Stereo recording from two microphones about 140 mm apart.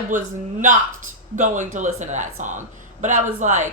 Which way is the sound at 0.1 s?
65° right (ahead or behind).